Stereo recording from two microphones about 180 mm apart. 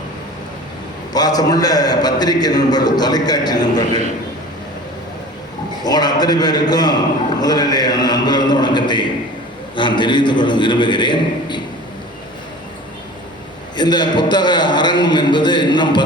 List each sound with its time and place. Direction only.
1.1 s a man's voice: 20° left (ahead or behind)
5.8 s a man's voice: 20° left (ahead or behind)
13.7 s a man's voice: 25° left (ahead or behind)